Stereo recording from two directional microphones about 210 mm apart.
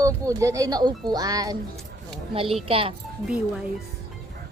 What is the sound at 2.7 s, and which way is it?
Speech, 25° right (ahead or behind).